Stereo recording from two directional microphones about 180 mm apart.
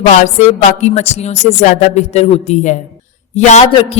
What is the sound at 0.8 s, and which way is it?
Speech, 40° left (ahead or behind).